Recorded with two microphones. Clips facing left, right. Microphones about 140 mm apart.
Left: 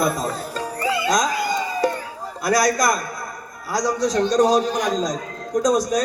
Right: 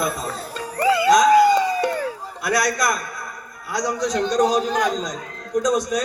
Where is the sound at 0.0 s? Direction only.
40° left (ahead or behind).